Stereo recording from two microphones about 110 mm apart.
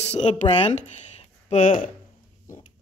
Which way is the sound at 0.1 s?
90° left.